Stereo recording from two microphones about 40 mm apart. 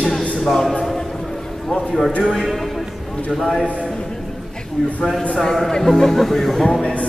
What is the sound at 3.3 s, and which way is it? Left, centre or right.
Speech, centre.